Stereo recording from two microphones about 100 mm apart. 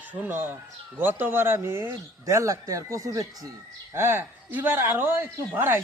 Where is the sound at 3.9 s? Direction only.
25° right (ahead or behind).